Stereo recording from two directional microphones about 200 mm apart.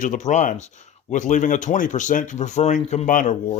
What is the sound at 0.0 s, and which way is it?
Speech, 40° left (ahead or behind).